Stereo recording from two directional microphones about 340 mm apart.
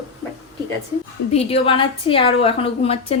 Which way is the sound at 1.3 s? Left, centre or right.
Centre.